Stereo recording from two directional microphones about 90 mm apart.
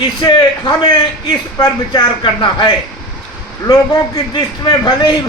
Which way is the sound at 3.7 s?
40° left (ahead or behind).